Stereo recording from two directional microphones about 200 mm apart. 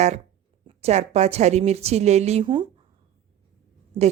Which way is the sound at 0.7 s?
30° right (ahead or behind).